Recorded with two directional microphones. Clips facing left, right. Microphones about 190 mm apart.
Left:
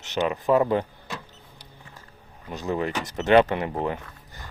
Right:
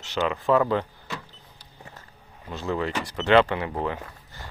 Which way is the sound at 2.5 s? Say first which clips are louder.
Left 1 dB; 15° left (ahead or behind).